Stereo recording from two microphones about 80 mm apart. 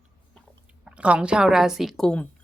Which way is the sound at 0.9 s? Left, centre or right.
Centre.